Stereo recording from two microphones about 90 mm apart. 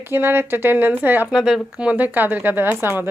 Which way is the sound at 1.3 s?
5° right (ahead or behind).